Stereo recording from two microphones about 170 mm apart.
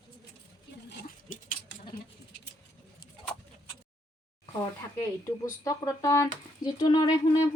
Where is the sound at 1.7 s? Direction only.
90° left.